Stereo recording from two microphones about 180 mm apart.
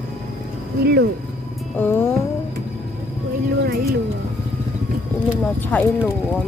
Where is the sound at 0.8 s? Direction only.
60° right (ahead or behind).